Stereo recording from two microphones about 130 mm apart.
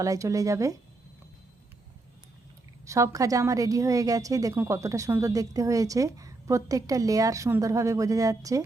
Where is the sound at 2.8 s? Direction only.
25° right (ahead or behind).